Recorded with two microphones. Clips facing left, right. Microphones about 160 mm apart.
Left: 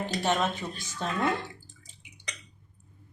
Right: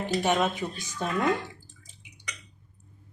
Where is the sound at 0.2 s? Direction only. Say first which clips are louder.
Right 2 dB; 15° right (ahead or behind).